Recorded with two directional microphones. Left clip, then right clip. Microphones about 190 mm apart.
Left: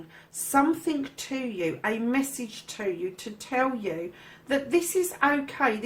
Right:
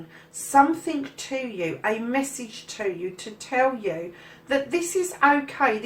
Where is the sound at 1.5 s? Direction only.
40° left (ahead or behind).